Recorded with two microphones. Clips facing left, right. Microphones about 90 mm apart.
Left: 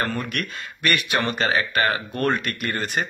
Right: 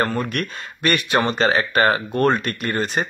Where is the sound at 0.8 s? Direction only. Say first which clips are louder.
Right 4 dB; 25° right (ahead or behind).